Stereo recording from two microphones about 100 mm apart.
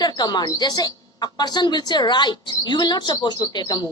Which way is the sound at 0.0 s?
45° left (ahead or behind).